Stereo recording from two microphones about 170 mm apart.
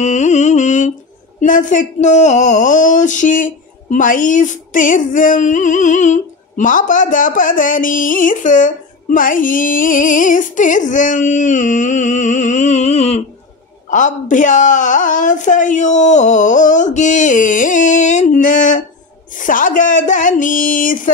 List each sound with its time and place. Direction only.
0.0 s music: 45° left (ahead or behind)
1.4 s speech: 50° left (ahead or behind)